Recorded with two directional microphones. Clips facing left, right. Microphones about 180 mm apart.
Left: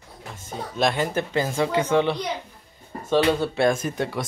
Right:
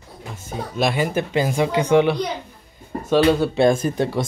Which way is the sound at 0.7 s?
10° right (ahead or behind).